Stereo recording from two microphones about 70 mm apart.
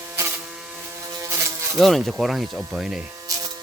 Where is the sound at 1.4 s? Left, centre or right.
Right.